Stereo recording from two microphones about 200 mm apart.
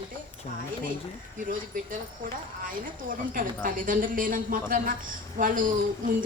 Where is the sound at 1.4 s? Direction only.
40° right (ahead or behind).